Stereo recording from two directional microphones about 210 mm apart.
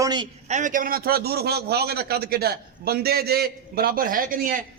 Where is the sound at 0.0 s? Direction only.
20° right (ahead or behind).